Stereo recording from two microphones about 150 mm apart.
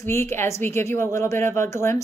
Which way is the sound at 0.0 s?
15° left (ahead or behind).